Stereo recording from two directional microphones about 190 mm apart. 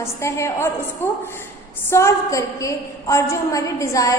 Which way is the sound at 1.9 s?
15° left (ahead or behind).